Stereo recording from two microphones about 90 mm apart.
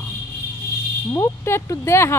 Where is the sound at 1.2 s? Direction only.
35° left (ahead or behind).